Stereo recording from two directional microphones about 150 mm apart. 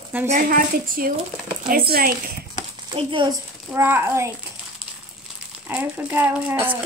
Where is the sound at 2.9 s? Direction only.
35° right (ahead or behind).